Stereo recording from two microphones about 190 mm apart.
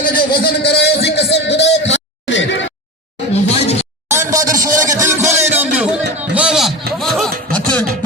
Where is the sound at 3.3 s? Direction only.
35° left (ahead or behind).